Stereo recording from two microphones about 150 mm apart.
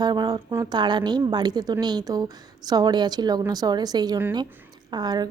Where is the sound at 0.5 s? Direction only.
25° right (ahead or behind).